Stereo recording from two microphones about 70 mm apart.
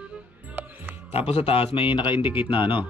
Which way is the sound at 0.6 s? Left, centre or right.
Right.